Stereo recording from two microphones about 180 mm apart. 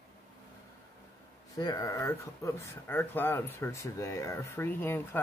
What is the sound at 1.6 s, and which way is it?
Speech, 20° left (ahead or behind).